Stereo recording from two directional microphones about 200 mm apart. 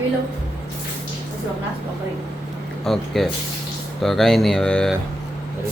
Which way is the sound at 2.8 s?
Centre (ahead or behind).